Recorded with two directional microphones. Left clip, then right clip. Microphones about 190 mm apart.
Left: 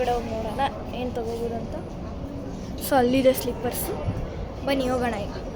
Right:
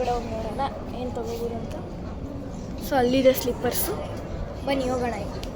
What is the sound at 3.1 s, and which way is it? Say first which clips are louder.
Speech: right 4 dB; centre (ahead or behind).